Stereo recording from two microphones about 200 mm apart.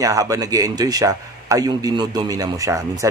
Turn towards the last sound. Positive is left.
turn(degrees=-15)  # may be behind; listen again after turning